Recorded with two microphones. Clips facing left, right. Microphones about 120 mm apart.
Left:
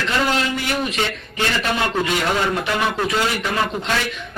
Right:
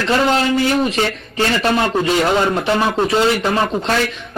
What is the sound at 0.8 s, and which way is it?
A man's voice, 35° right (ahead or behind).